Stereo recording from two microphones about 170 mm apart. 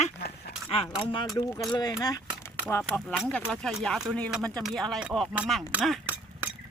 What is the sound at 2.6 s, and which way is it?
Speech, 10° left (ahead or behind).